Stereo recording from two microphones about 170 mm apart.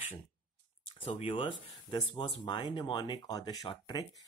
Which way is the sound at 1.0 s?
35° left (ahead or behind).